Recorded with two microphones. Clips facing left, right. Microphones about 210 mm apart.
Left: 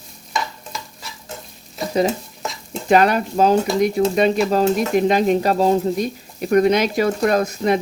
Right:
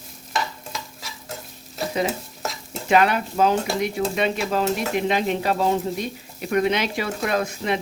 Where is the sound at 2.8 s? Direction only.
40° left (ahead or behind).